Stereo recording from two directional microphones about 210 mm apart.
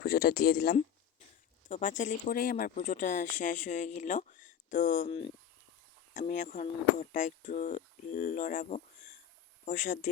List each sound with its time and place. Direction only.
0.0 s speech: 45° left (ahead or behind)
1.6 s speech: 35° left (ahead or behind)